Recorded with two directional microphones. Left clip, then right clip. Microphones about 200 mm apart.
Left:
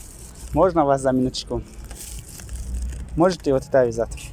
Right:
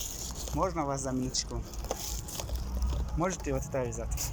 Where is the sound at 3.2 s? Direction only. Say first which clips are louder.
Left 14 dB; 60° left (ahead or behind).